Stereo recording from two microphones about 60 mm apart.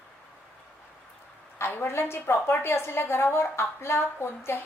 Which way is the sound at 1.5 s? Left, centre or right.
Left.